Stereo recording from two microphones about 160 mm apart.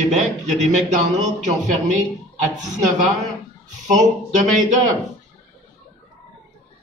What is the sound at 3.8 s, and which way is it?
Speech, 50° right (ahead or behind).